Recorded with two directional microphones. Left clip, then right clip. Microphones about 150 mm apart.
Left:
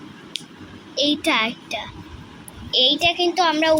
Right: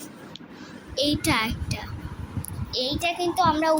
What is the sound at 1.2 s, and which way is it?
A child's voice, 5° left (ahead or behind).